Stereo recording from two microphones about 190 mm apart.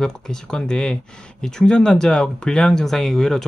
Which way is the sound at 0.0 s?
5° left (ahead or behind).